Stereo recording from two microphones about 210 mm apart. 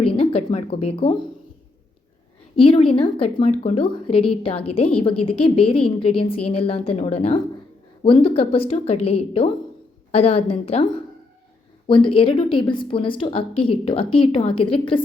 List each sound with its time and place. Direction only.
0.0 s a woman's voice: 25° left (ahead or behind)
2.6 s a woman's voice: 25° left (ahead or behind)
11.9 s a woman's voice: 25° left (ahead or behind)